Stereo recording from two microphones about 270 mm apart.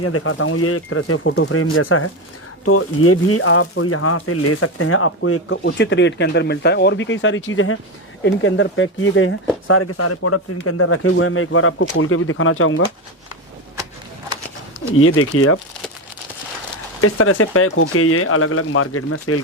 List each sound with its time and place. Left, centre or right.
0.0 s speech: left
14.9 s speech: left
17.0 s speech: left